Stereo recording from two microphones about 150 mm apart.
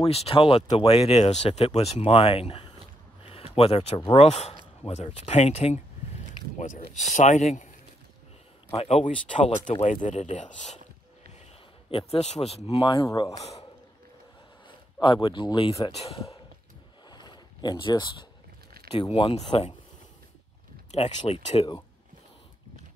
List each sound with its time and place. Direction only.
0.0 s speech: 40° left (ahead or behind)
6.6 s speech: 60° left (ahead or behind)
8.7 s speech: 45° left (ahead or behind)
12.1 s speech: 45° left (ahead or behind)
15.0 s speech: 30° left (ahead or behind)
17.1 s a sound: 30° left (ahead or behind)
18.9 s speech: 40° left (ahead or behind)
20.9 s speech: 45° left (ahead or behind)